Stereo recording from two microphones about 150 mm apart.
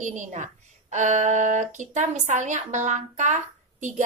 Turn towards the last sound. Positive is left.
turn(degrees=-55)  # may be behind; listen again after turning